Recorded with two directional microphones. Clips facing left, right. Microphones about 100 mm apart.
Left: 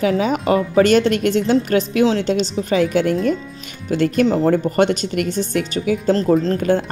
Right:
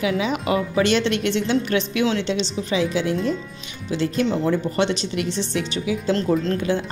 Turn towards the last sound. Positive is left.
turn(degrees=50)  # may be behind; listen again after turning